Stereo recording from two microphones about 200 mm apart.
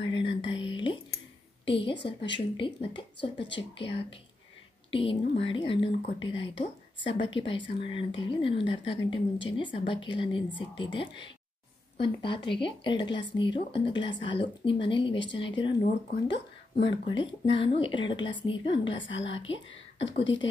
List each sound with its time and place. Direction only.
0.0 s whispering: 25° left (ahead or behind)
2.0 s speech: 60° left (ahead or behind)
2.5 s speech: 25° left (ahead or behind)
3.3 s speech: 65° left (ahead or behind)
3.7 s a woman's voice: 25° left (ahead or behind)
16.3 s speech: 60° left (ahead or behind)
17.0 s speech: 25° left (ahead or behind)
19.0 s speech: 70° left (ahead or behind)